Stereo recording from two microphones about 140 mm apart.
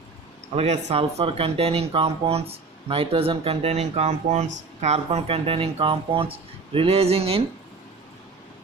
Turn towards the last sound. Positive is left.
turn(degrees=-45)  # may be behind; listen again after turning